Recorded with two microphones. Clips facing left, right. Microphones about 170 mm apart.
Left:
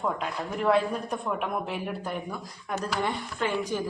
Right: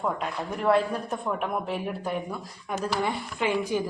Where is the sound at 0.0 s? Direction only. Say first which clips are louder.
Right 1 dB; 5° right (ahead or behind).